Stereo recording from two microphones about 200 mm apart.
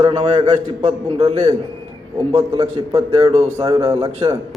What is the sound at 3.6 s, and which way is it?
Speech, 15° right (ahead or behind).